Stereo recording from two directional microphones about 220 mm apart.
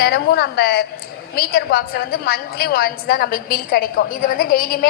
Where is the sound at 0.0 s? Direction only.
45° left (ahead or behind).